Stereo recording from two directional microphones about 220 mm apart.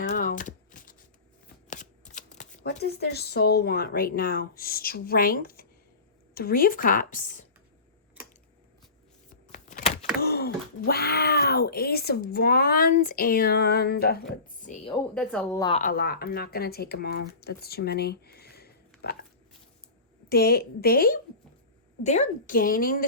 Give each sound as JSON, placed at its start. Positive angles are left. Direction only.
{"t": 0.0, "sound": "a sound", "side_deg": 35}
{"t": 1.7, "sound": "shuffling cards", "side_deg": 35}
{"t": 2.8, "sound": "speech", "side_deg": 45}
{"t": 9.3, "sound": "a sound", "side_deg": 35}
{"t": 10.2, "sound": "speech", "side_deg": 45}
{"t": 15.1, "sound": "speech", "side_deg": 5}
{"t": 15.5, "sound": "a woman's voice", "side_deg": 20}
{"t": 15.8, "sound": "speech", "side_deg": 40}
{"t": 20.3, "sound": "speech", "side_deg": 45}